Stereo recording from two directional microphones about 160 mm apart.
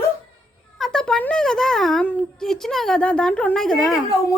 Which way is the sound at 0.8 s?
5° left (ahead or behind).